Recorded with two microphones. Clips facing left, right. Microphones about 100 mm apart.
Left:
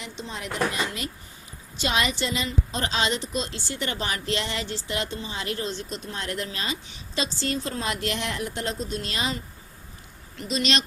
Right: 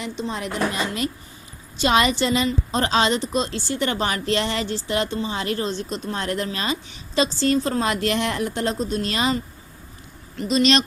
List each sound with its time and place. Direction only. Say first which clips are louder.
0.0 s a woman's voice: right 8 dB; 50° right (ahead or behind)
1.8 s a woman's voice: right 7 dB; 50° right (ahead or behind)
10.5 s a woman's voice: right 7 dB; 45° right (ahead or behind)